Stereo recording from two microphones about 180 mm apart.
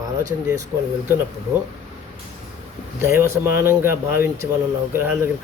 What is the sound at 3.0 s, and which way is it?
Speech, 15° right (ahead or behind).